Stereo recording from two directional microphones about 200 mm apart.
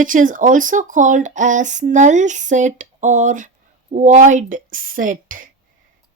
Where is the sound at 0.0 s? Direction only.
40° right (ahead or behind).